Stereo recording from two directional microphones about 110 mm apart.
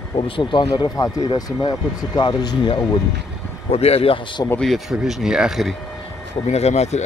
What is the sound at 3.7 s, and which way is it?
Speech, 65° left (ahead or behind).